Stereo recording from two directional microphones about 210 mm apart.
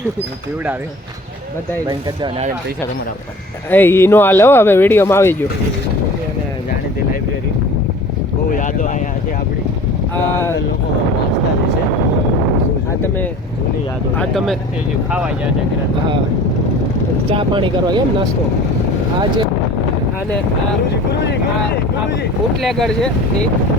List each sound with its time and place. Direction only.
3.7 s speech: 10° left (ahead or behind)
8.5 s a sound: 40° left (ahead or behind)
14.2 s speech: centre (ahead or behind)
17.3 s speech: 25° right (ahead or behind)
22.6 s speech: centre (ahead or behind)